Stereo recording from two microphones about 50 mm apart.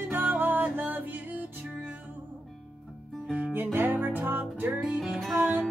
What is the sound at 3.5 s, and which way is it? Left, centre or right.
Music, right.